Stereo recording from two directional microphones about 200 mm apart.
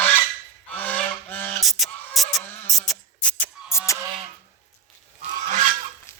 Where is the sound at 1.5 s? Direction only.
Centre (ahead or behind).